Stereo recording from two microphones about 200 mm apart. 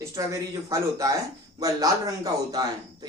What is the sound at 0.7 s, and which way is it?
A man's voice, 15° right (ahead or behind).